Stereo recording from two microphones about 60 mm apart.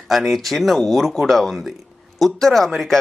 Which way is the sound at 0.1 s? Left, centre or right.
Centre.